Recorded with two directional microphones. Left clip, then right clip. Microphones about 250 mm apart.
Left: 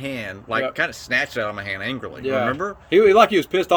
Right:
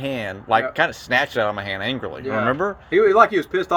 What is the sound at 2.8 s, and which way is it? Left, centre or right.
Speech, left.